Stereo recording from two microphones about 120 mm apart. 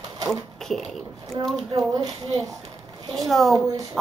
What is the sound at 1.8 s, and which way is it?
Speech, 30° right (ahead or behind).